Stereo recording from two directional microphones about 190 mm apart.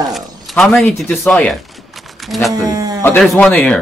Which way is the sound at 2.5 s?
20° right (ahead or behind).